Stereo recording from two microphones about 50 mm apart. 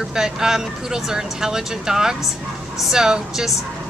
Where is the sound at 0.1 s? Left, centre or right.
Centre.